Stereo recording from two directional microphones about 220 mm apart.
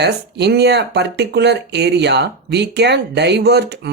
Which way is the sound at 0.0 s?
50° right (ahead or behind).